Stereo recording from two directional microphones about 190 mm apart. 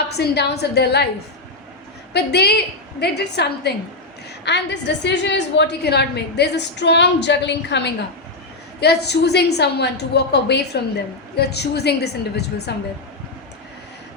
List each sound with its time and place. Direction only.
0.2 s a woman's voice: 60° left (ahead or behind)
2.1 s a woman's voice: 60° left (ahead or behind)